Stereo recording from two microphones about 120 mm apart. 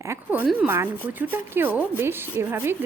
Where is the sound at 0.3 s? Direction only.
10° right (ahead or behind).